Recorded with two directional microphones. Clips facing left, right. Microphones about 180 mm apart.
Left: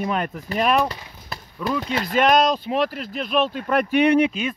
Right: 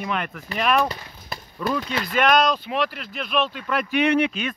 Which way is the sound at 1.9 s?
30° left (ahead or behind).